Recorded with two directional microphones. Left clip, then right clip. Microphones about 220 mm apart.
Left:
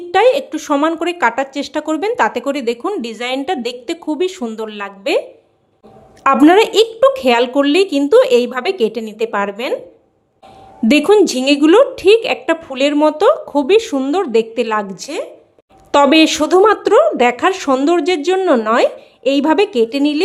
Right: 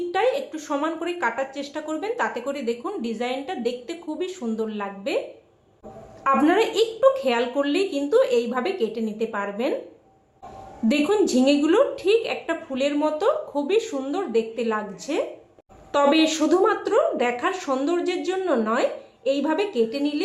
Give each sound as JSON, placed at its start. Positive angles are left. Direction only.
{"t": 0.1, "sound": "a woman's voice", "side_deg": 45}
{"t": 6.2, "sound": "a woman's voice", "side_deg": 45}
{"t": 10.8, "sound": "a woman's voice", "side_deg": 45}